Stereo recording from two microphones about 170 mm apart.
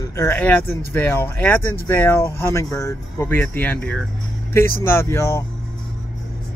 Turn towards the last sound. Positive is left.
turn(degrees=15)  # may be behind; listen again after turning